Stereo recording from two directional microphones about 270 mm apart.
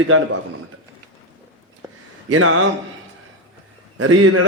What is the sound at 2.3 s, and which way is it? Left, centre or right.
Speech, right.